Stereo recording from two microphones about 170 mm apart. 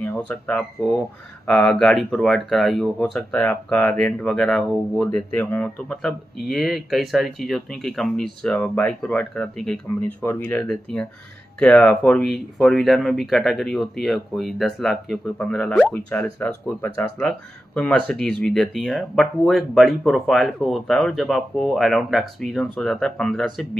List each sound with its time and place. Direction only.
0.0 s speech: 10° left (ahead or behind)